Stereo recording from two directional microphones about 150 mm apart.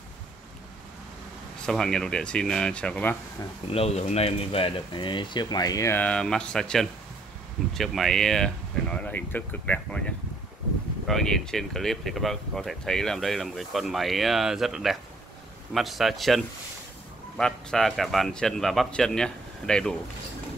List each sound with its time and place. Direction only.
1.7 s speech: 5° left (ahead or behind)
3.7 s speech: 45° left (ahead or behind); by 20.0 s 5° left (ahead or behind)